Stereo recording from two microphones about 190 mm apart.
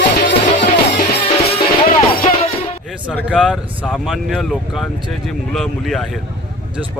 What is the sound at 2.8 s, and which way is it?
Speech, 5° right (ahead or behind).